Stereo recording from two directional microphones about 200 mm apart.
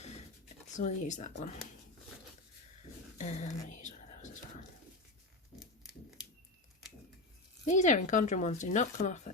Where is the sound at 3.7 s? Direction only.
35° left (ahead or behind).